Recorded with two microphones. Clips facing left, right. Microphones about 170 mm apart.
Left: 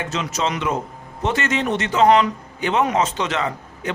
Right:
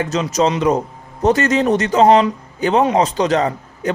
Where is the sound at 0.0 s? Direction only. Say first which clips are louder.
Right 7 dB; 40° right (ahead or behind).